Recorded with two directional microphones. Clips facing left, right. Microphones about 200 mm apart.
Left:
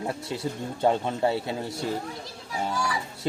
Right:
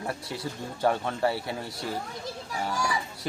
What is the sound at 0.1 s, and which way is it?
Speech, 25° left (ahead or behind).